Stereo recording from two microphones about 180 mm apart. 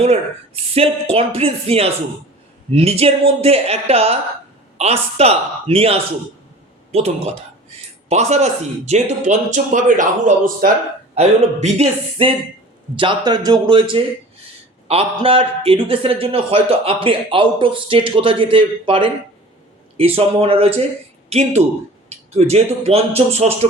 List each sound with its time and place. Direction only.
0.0 s speech: 35° right (ahead or behind)
8.1 s speech: 40° right (ahead or behind)
11.1 s a man's voice: 35° right (ahead or behind)